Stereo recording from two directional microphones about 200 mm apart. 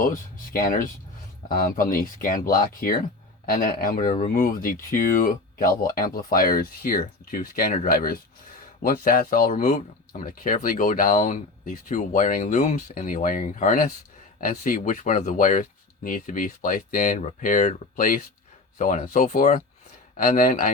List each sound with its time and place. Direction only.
0.0 s speech: 45° left (ahead or behind)